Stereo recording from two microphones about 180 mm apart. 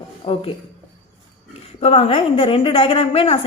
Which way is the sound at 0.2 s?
25° left (ahead or behind).